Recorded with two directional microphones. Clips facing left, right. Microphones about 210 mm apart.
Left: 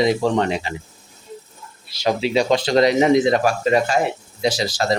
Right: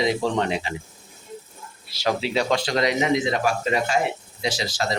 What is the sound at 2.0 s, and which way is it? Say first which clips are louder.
Speech: left 4 dB; 15° left (ahead or behind).